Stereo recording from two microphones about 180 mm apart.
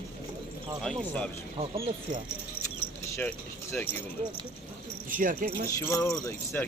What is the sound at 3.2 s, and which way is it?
Speech, 10° left (ahead or behind).